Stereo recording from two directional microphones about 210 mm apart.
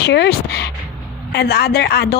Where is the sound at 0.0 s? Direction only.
55° left (ahead or behind).